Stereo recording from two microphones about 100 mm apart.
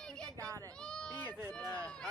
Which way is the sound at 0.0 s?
5° left (ahead or behind).